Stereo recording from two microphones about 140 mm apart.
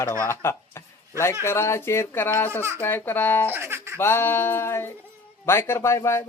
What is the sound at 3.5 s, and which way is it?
Music, 20° right (ahead or behind).